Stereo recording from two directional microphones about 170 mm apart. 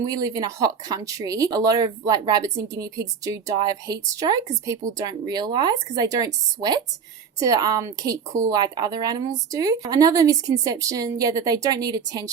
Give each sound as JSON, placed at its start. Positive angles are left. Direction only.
{"t": 0.0, "sound": "speech", "side_deg": -20}